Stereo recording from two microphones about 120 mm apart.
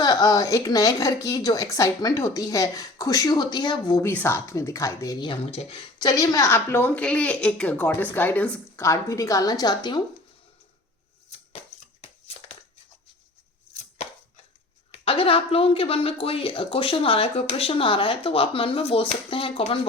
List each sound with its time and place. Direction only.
0.0 s a woman's voice: 35° left (ahead or behind)
4.0 s a woman's voice: 20° left (ahead or behind)
5.3 s speech: 45° left (ahead or behind)
6.1 s a woman's voice: 30° left (ahead or behind); by 8.8 s 10° left (ahead or behind)
8.8 s a woman's voice: 25° left (ahead or behind)
12.0 s a sound: 55° left (ahead or behind)
14.0 s chopping: 75° left (ahead or behind)
14.9 s a woman's voice: 50° left (ahead or behind)